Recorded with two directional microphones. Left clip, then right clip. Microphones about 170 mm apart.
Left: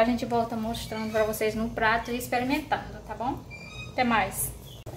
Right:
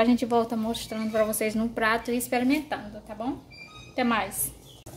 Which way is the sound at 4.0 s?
50° right (ahead or behind).